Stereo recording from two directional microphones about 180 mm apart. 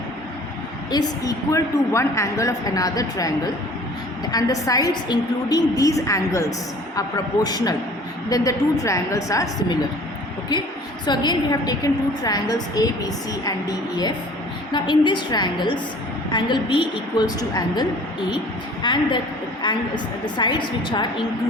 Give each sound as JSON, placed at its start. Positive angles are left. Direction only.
{"t": 0.9, "sound": "a woman's voice", "side_deg": 20}
{"t": 14.7, "sound": "a woman's voice", "side_deg": 25}